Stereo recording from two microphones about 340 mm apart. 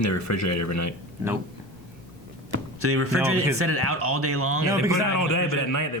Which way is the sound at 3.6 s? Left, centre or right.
Right.